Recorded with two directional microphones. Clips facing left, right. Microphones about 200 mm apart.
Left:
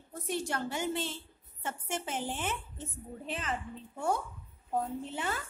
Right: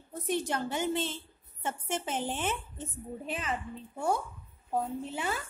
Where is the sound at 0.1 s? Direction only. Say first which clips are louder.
Right 3 dB; 20° right (ahead or behind).